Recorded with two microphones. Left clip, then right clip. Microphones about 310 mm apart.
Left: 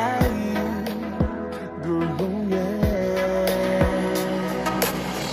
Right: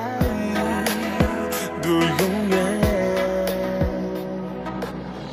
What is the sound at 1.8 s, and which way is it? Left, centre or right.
Music, right.